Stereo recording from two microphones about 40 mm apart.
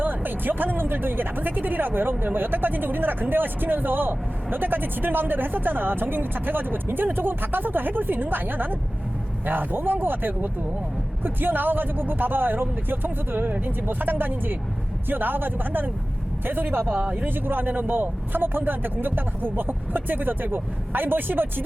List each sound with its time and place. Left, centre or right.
0.0 s speech: right
17.0 s speech: right
17.2 s speech: right